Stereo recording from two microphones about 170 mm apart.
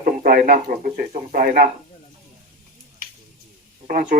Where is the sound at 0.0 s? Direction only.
55° right (ahead or behind).